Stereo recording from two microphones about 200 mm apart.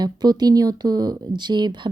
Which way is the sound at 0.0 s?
20° right (ahead or behind).